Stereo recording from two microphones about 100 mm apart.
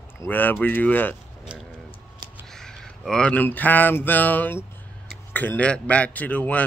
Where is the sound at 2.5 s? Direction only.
5° left (ahead or behind).